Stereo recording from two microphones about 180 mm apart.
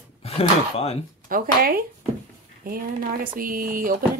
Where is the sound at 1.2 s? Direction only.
55° right (ahead or behind).